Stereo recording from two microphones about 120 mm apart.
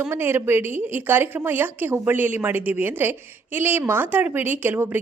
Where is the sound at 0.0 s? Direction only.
15° right (ahead or behind).